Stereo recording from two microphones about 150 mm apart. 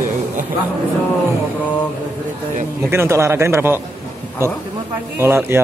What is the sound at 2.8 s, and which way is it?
Speech, 15° right (ahead or behind).